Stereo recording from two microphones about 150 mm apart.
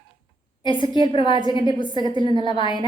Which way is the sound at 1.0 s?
30° left (ahead or behind).